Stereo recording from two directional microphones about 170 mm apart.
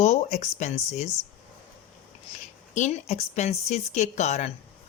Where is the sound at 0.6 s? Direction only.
40° left (ahead or behind).